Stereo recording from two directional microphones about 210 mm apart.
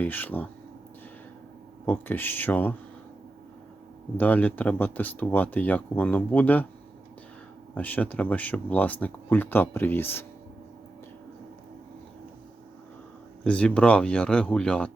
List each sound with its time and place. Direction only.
0.0 s speech: 10° left (ahead or behind)
1.9 s speech: 10° left (ahead or behind)
4.2 s speech: 5° left (ahead or behind)
7.8 s speech: 5° left (ahead or behind)
13.4 s speech: 5° left (ahead or behind)